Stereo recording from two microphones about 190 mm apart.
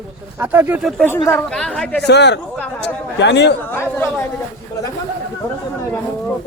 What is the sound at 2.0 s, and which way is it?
Speech, 65° left (ahead or behind).